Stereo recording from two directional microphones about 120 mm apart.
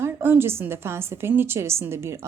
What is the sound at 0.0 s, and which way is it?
A woman's voice, 20° right (ahead or behind).